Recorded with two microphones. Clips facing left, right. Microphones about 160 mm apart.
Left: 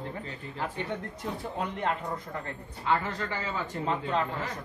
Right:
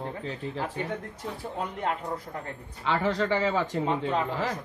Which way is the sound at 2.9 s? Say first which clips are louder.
Right 4 dB; 90° right.